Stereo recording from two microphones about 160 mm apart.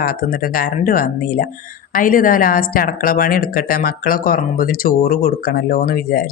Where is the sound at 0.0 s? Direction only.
65° left (ahead or behind).